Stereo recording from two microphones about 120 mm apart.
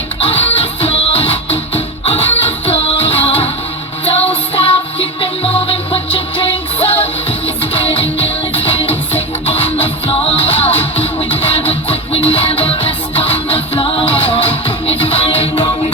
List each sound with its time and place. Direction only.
0.2 s music: 50° left (ahead or behind)
4.5 s music: 50° left (ahead or behind)